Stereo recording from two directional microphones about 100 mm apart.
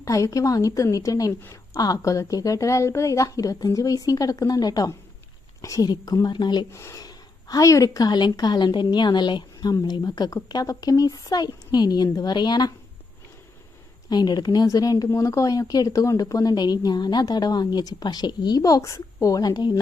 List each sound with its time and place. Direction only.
0.0 s speech: 35° left (ahead or behind); by 6.7 s 50° left (ahead or behind)
6.7 s speech: 30° left (ahead or behind)
14.1 s speech: 45° left (ahead or behind)